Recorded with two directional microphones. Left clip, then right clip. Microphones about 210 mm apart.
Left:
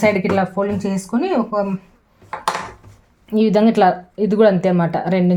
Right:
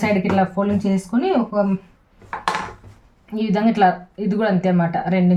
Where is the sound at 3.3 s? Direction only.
40° left (ahead or behind).